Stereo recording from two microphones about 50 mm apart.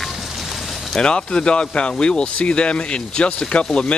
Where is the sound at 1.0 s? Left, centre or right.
Centre.